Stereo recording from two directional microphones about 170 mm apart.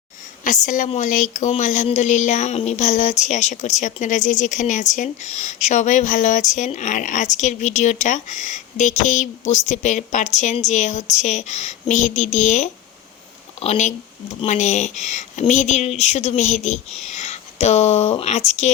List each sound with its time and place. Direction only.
0.4 s speech: 45° left (ahead or behind)